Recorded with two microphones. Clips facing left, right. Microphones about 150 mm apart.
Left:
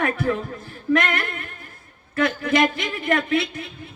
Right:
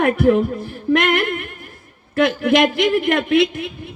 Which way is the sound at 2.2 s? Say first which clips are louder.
Right 5 dB; 90° right.